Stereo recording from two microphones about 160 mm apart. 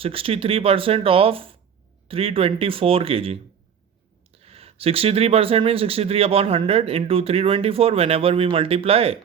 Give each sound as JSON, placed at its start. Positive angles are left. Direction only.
{"t": 0.0, "sound": "speech", "side_deg": -35}